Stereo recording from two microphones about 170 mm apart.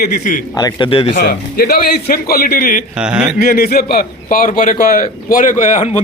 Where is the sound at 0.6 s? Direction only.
25° left (ahead or behind).